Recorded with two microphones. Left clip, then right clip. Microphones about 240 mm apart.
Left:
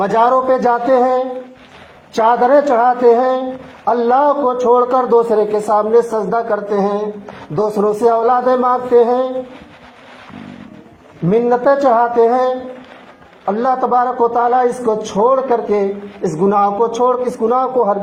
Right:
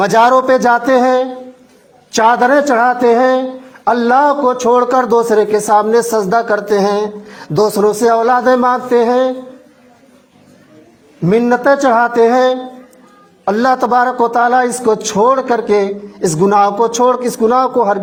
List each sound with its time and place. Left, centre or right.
0.0 s a man's voice: right
11.3 s a man's voice: right